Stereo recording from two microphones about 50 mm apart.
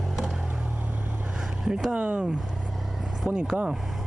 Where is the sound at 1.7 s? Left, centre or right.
Centre.